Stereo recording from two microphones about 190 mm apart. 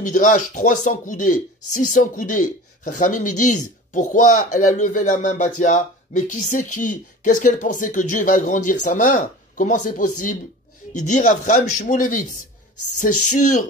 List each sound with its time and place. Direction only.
0.0 s speech: 40° left (ahead or behind)